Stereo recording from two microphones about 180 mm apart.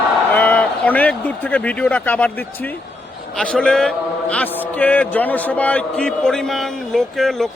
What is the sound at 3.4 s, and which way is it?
A man's voice, 5° left (ahead or behind).